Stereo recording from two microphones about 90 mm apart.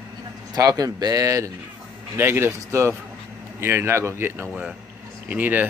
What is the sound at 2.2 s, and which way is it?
Speech, 25° right (ahead or behind).